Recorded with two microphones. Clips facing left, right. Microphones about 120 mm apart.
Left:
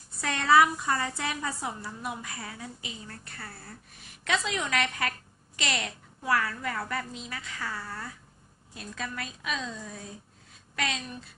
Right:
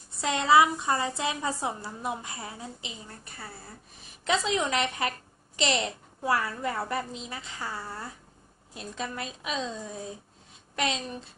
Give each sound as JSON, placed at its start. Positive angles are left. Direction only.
{"t": 0.2, "sound": "a woman's voice", "side_deg": -20}